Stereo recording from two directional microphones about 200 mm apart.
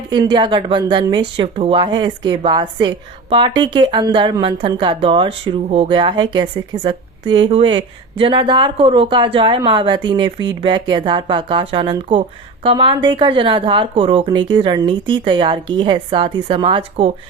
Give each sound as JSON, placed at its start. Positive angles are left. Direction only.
{"t": 0.1, "sound": "a woman's voice", "side_deg": -20}